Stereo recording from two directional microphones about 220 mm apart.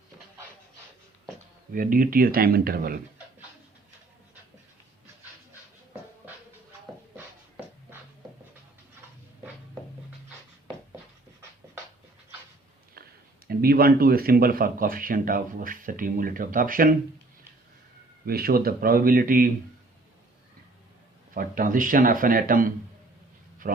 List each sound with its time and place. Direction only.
1.7 s speech: 40° right (ahead or behind)
13.5 s speech: 45° right (ahead or behind)
18.3 s speech: 40° right (ahead or behind)
21.3 s speech: 40° right (ahead or behind)